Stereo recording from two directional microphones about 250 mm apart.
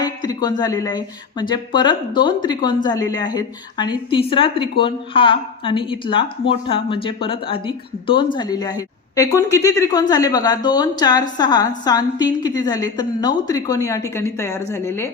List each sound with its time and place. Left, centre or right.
0.0 s speech: centre